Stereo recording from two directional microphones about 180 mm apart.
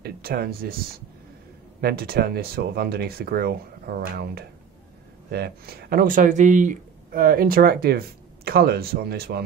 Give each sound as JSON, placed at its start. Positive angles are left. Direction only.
{"t": 0.0, "sound": "speech", "side_deg": -60}
{"t": 1.8, "sound": "speech", "side_deg": -60}